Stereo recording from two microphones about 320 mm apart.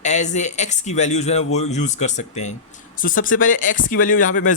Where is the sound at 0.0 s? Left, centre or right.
Left.